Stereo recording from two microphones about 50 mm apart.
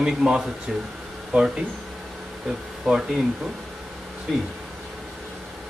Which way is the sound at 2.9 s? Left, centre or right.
Centre.